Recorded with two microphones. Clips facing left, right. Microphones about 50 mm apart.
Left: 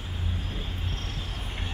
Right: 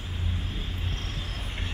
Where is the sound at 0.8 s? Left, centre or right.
Right.